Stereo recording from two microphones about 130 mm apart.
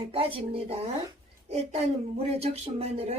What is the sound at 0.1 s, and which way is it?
Speech, 45° right (ahead or behind).